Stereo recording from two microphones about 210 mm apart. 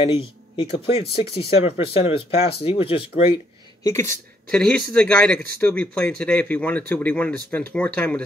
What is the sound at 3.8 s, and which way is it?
Speech, 15° left (ahead or behind).